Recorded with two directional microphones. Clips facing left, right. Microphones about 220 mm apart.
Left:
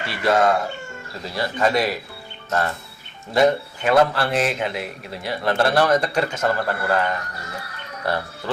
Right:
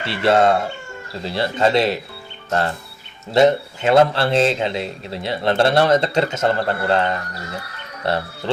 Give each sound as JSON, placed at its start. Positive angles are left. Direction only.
{"t": 0.0, "sound": "a man's voice", "side_deg": -25}